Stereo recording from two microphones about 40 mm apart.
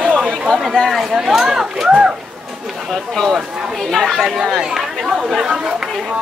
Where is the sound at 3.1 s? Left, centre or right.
Centre.